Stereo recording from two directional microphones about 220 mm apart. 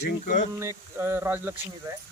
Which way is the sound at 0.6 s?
10° right (ahead or behind).